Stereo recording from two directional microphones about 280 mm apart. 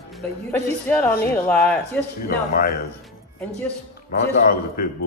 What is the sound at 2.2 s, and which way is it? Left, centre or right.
Speech, left.